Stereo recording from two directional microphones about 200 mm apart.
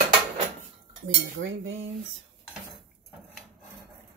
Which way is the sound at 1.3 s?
70° right (ahead or behind).